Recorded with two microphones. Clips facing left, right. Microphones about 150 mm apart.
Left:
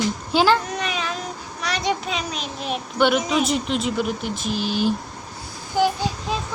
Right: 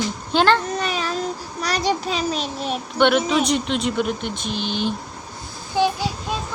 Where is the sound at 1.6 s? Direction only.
35° right (ahead or behind).